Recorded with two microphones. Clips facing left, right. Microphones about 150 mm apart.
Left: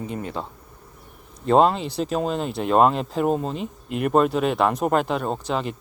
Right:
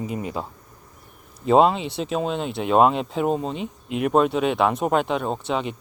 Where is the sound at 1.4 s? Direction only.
Centre (ahead or behind).